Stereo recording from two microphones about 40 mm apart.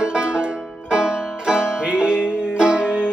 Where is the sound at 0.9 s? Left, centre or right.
Right.